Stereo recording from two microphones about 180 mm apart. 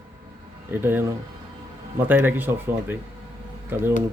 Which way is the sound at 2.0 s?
10° right (ahead or behind).